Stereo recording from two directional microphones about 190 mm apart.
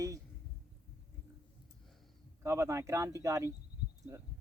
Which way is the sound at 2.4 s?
15° right (ahead or behind).